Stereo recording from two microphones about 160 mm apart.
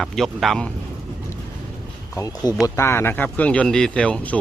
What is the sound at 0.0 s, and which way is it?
Speech, centre (ahead or behind).